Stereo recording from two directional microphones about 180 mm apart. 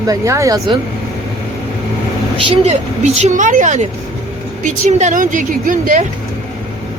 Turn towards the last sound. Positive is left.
turn(degrees=-50)  # may be behind; listen again after turning